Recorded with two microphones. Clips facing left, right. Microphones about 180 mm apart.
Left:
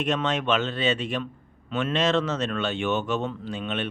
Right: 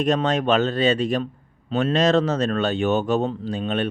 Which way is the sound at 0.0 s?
35° right (ahead or behind).